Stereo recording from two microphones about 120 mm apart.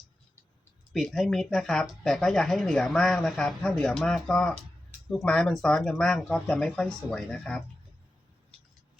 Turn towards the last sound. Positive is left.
turn(degrees=5)  # may be behind; listen again after turning